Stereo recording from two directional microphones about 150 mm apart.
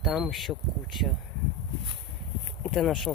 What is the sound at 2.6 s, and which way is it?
Speech, centre (ahead or behind).